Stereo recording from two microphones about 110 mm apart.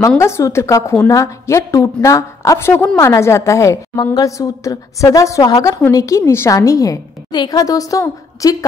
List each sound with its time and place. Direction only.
0.2 s a woman's voice: 25° left (ahead or behind)